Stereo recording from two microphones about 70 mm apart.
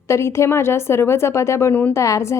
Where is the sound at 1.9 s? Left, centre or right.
Left.